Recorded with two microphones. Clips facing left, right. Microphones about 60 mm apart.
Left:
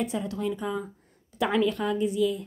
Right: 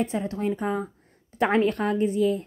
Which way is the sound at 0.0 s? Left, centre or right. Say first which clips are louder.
Right 3 dB; right.